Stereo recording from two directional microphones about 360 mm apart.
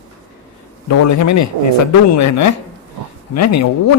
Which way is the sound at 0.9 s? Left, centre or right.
Left.